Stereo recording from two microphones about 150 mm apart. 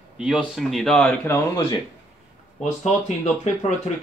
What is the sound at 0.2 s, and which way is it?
Speech, centre (ahead or behind).